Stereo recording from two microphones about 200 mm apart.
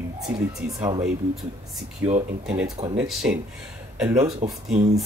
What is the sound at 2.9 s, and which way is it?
Speech, 5° right (ahead or behind).